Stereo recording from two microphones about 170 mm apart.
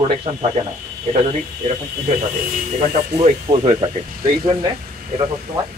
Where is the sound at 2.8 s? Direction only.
45° right (ahead or behind).